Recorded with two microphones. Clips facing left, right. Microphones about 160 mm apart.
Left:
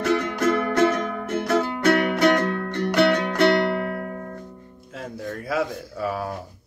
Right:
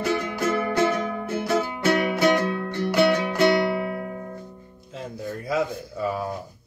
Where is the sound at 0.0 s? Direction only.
60° left (ahead or behind).